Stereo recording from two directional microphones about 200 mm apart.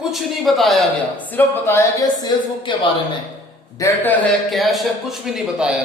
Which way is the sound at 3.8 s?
10° left (ahead or behind).